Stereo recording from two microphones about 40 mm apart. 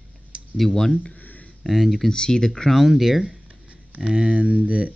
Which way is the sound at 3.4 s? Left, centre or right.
Right.